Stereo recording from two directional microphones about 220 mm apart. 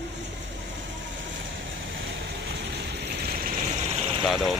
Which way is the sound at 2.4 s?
50° right (ahead or behind).